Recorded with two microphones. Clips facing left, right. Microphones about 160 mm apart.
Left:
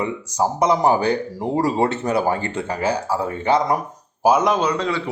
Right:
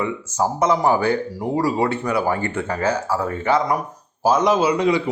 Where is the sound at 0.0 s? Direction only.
15° left (ahead or behind).